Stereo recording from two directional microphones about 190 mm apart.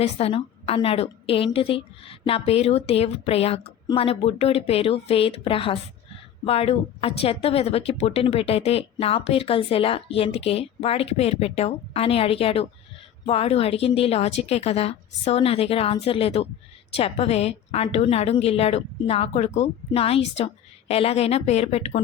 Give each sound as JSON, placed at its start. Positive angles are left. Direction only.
{"t": 0.0, "sound": "speech", "side_deg": 30}